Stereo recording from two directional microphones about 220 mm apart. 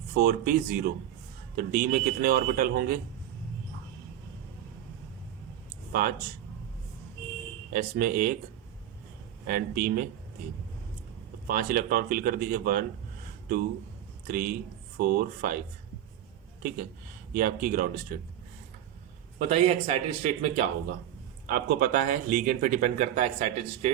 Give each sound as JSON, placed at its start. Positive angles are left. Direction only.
{"t": 0.1, "sound": "speech", "side_deg": -40}
{"t": 5.9, "sound": "speech", "side_deg": -40}
{"t": 7.7, "sound": "speech", "side_deg": -40}
{"t": 9.5, "sound": "speech", "side_deg": -40}
{"t": 11.4, "sound": "speech", "side_deg": -40}
{"t": 14.3, "sound": "speech", "side_deg": -40}
{"t": 17.3, "sound": "speech", "side_deg": -40}
{"t": 19.4, "sound": "speech", "side_deg": -25}
{"t": 21.4, "sound": "speech", "side_deg": -40}